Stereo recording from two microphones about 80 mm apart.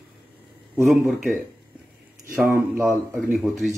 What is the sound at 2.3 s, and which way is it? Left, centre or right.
Speech, right.